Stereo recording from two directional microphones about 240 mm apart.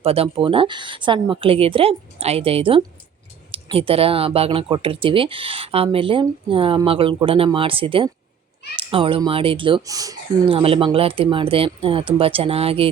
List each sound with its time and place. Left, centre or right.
0.0 s speech: right